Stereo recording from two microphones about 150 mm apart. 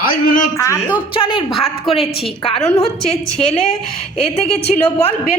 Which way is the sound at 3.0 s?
5° left (ahead or behind).